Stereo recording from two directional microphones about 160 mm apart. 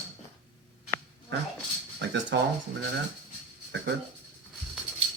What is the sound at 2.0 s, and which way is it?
Speech, 90° right.